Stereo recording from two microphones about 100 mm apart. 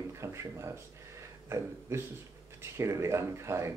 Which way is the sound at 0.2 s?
30° right (ahead or behind).